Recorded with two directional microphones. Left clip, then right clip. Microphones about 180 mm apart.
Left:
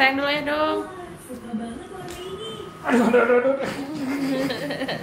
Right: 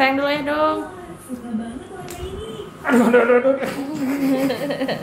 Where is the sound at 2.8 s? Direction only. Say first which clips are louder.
Right 3 dB; centre (ahead or behind).